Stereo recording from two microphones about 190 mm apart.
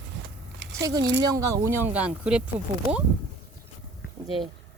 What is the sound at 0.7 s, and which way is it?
Speech, 20° right (ahead or behind).